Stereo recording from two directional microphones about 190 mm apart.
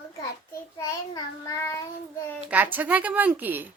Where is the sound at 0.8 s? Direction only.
15° left (ahead or behind).